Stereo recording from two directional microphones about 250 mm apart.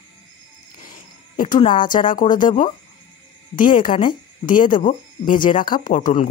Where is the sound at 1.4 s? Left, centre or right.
Left.